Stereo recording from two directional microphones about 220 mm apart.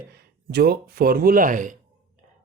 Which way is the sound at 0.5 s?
45° right (ahead or behind).